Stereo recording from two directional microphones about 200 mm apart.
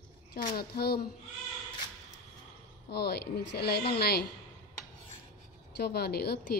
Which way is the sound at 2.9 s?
55° left (ahead or behind).